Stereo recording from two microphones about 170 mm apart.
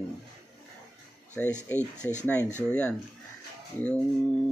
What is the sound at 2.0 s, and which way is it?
Speech, 10° left (ahead or behind).